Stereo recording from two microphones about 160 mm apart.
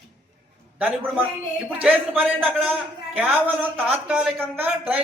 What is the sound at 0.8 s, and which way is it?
A man's voice, 10° right (ahead or behind).